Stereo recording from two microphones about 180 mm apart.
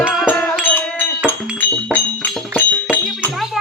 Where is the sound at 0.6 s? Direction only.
10° left (ahead or behind).